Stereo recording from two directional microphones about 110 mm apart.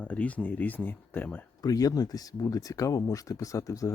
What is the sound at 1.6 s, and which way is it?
Speech, 35° left (ahead or behind).